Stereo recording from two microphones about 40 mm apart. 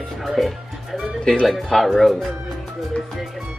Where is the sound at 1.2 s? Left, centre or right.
Centre.